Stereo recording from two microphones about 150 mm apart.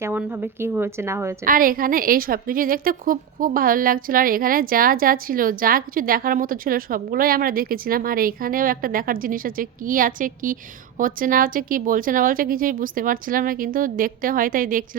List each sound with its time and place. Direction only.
0.0 s a woman's voice: 10° right (ahead or behind)
1.5 s a woman's voice: 70° right (ahead or behind)